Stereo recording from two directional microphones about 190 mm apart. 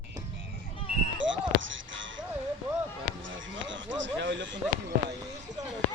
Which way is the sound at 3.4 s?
80° right.